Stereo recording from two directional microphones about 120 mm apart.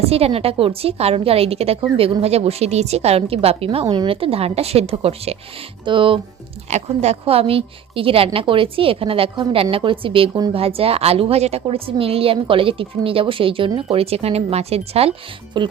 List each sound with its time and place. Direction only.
0.0 s a woman's voice: 55° right (ahead or behind)
3.8 s a woman's voice: 40° right (ahead or behind); by 5.4 s 55° right (ahead or behind)
5.8 s a woman's voice: 45° right (ahead or behind)
6.7 s a woman's voice: 65° right (ahead or behind)
15.6 s speech: 40° right (ahead or behind)